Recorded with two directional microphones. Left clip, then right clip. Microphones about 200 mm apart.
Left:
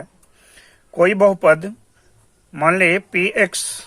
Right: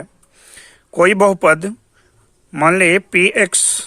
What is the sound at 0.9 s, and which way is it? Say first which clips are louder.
Speech: right 2 dB; 40° right (ahead or behind).